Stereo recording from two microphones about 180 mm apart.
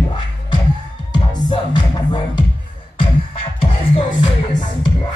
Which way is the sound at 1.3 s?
25° left (ahead or behind).